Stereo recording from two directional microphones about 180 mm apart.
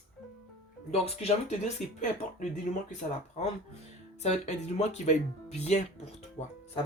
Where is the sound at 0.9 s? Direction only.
35° left (ahead or behind).